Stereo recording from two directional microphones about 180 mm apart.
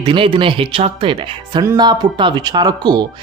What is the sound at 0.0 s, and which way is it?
Speech, 30° right (ahead or behind).